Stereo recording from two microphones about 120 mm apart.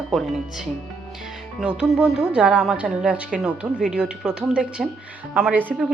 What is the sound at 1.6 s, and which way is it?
A woman's voice, 5° right (ahead or behind).